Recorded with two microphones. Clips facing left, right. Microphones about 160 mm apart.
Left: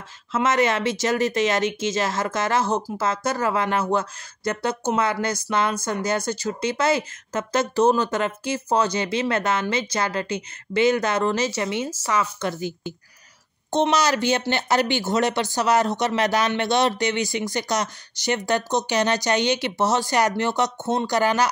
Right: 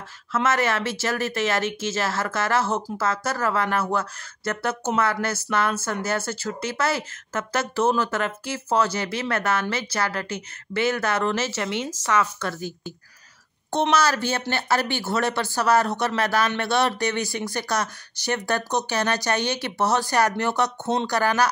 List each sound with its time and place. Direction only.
0.3 s speech: 20° left (ahead or behind)